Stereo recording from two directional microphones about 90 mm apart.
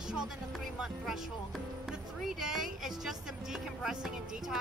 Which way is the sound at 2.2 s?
5° right (ahead or behind).